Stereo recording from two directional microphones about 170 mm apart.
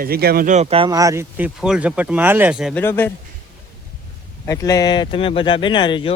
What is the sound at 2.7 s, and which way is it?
Speech, 10° left (ahead or behind).